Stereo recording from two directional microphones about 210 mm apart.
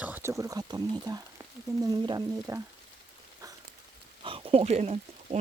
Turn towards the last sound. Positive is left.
turn(degrees=-30)  # may be behind; listen again after turning